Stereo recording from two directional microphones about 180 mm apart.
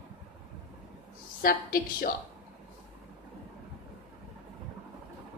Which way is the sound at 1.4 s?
55° left (ahead or behind).